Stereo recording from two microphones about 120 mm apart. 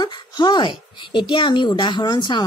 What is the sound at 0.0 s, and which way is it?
Speech, 40° left (ahead or behind).